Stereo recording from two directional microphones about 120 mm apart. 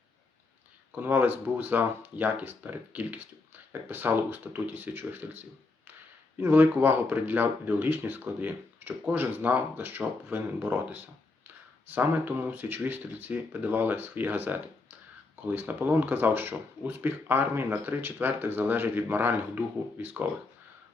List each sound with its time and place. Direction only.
0.9 s speech: 15° right (ahead or behind)